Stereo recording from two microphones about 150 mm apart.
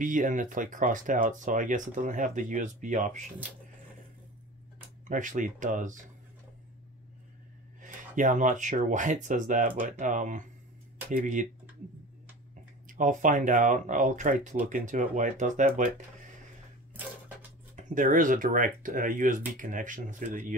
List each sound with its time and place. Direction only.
0.0 s speech: 60° right (ahead or behind)
5.0 s speech: 60° right (ahead or behind)
7.8 s speech: 60° right (ahead or behind)
12.8 s speech: 60° right (ahead or behind)
17.7 s speech: 60° right (ahead or behind)